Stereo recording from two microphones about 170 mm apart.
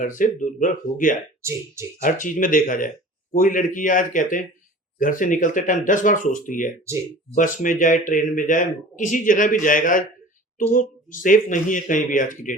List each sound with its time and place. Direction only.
0.0 s speech: 50° left (ahead or behind)
1.4 s speech: 15° right (ahead or behind)
2.0 s speech: 50° left (ahead or behind)
6.8 s speech: 15° right (ahead or behind)
7.3 s speech: 50° left (ahead or behind)